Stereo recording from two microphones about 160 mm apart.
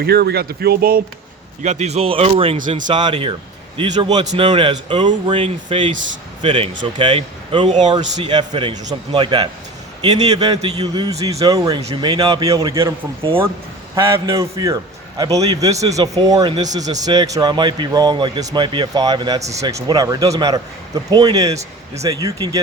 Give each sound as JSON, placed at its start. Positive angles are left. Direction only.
{"t": 0.0, "sound": "speech", "side_deg": -80}
{"t": 1.6, "sound": "a man's voice", "side_deg": -45}
{"t": 11.8, "sound": "a man's voice", "side_deg": -35}
{"t": 13.9, "sound": "a man's voice", "side_deg": -20}